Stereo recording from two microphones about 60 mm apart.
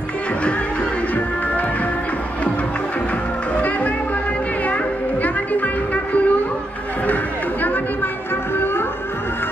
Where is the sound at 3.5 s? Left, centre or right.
Left.